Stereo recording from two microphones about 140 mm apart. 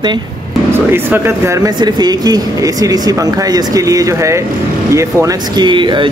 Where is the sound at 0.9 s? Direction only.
15° right (ahead or behind).